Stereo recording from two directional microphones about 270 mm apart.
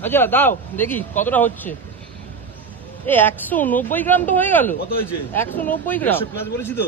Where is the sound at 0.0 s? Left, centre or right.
Centre.